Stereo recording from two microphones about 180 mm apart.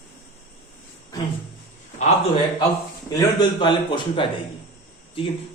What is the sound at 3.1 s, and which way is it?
A man's voice, 25° left (ahead or behind).